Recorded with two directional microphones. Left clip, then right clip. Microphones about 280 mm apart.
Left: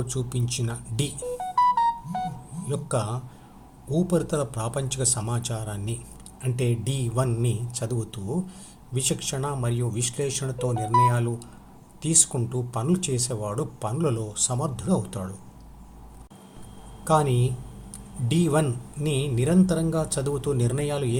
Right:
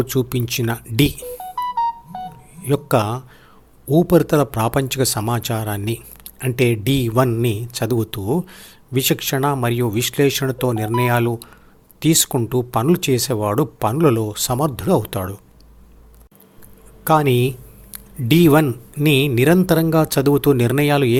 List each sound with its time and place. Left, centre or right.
0.0 s speech: right
1.5 s music: centre
2.6 s speech: right
17.0 s speech: right